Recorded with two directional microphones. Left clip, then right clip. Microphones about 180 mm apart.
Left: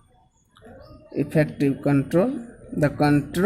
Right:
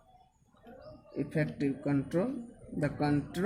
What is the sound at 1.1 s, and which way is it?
Speech, 45° left (ahead or behind).